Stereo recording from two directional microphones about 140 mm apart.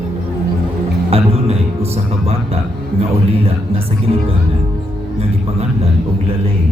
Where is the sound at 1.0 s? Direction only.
45° right (ahead or behind).